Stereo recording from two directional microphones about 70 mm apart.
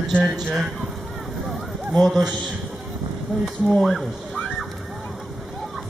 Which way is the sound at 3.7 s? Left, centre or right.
Centre.